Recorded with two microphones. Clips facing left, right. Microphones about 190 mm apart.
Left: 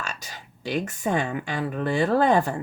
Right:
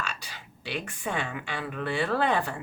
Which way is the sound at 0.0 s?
45° left (ahead or behind).